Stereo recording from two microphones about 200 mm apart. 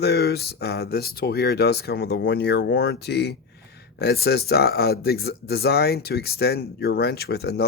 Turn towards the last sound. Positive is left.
turn(degrees=55)  # may be behind; listen again after turning